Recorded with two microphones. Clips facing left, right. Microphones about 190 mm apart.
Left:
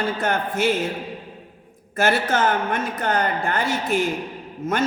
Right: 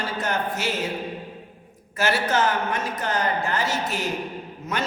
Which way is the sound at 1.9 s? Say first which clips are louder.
Left 2 dB; 50° left (ahead or behind).